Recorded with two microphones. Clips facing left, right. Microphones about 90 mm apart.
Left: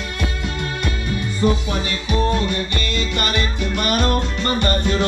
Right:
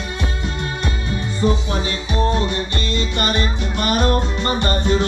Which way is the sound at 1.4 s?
10° right (ahead or behind).